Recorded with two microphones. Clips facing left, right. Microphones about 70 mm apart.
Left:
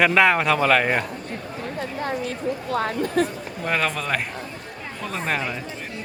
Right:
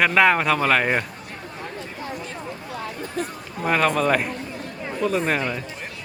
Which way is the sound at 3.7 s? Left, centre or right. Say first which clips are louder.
Right 5 dB; centre.